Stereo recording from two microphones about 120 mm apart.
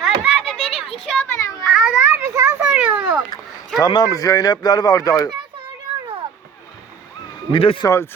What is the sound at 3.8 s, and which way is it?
Speech, 35° left (ahead or behind).